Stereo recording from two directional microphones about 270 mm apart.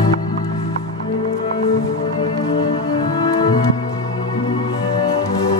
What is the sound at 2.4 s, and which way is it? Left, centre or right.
Music, centre.